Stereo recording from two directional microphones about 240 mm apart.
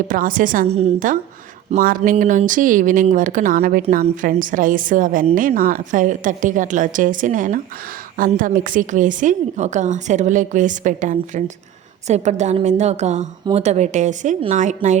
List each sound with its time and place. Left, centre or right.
0.1 s a woman's voice: right